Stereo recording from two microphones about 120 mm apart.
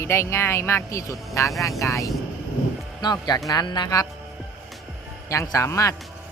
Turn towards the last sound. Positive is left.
turn(degrees=25)  # may be behind; listen again after turning